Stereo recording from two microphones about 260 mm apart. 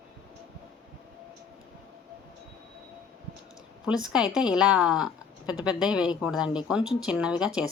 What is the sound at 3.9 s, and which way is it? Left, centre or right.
Speech, centre.